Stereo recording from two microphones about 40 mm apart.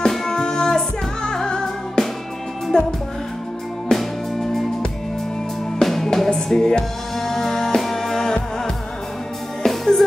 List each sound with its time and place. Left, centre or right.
0.1 s music: centre
3.9 s music: centre
5.8 s music: centre
9.7 s music: centre